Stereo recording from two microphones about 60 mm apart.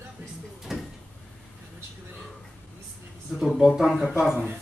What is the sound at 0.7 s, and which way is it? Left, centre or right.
Drawer open or close, centre.